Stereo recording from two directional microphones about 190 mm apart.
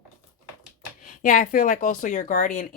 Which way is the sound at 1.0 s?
45° left (ahead or behind).